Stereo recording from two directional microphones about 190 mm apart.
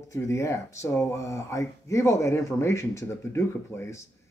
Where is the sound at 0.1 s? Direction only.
15° left (ahead or behind).